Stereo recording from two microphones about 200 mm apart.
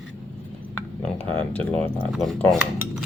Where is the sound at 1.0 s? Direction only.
5° left (ahead or behind).